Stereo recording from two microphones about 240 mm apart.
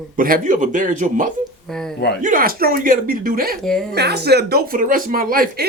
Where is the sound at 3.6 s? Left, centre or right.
Centre.